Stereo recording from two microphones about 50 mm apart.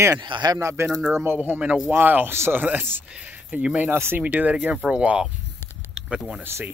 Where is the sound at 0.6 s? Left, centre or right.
Right.